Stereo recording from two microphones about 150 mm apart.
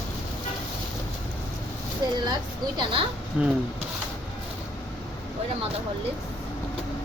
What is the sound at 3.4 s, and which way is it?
Speech, 5° right (ahead or behind).